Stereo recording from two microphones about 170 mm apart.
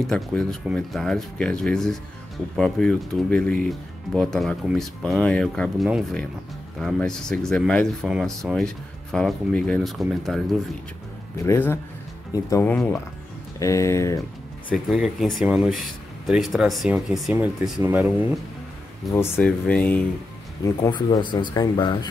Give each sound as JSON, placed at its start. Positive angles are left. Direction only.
{"t": 0.0, "sound": "speech", "side_deg": 5}
{"t": 11.3, "sound": "speech", "side_deg": 15}
{"t": 12.7, "sound": "speech", "side_deg": 5}
{"t": 13.6, "sound": "speech", "side_deg": 20}
{"t": 14.9, "sound": "speech", "side_deg": 0}
{"t": 19.1, "sound": "speech", "side_deg": 15}
{"t": 20.9, "sound": "speech", "side_deg": 25}